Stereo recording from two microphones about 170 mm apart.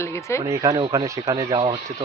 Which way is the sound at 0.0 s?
15° left (ahead or behind).